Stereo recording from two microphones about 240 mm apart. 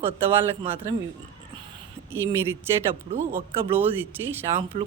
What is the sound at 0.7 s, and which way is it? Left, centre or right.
Speech, centre.